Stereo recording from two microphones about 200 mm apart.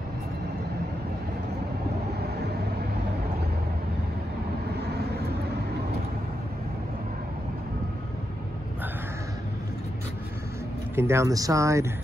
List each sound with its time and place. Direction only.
4.9 s vehicle: 55° right (ahead or behind)
11.0 s speech: 15° right (ahead or behind)